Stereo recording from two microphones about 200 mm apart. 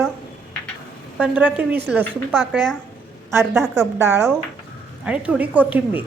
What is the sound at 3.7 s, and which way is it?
A woman's voice, 10° right (ahead or behind).